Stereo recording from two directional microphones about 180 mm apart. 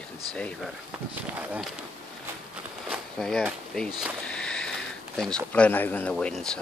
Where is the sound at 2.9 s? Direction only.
5° left (ahead or behind).